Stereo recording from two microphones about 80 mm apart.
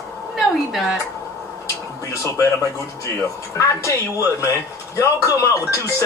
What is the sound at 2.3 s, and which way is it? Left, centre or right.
Speech, left.